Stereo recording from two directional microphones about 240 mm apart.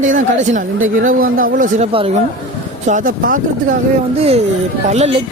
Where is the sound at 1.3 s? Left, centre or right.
Right.